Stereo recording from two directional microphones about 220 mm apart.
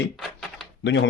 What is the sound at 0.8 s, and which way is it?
Speech, 55° left (ahead or behind).